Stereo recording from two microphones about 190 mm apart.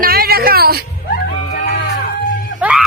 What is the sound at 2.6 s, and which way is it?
Music, 5° right (ahead or behind).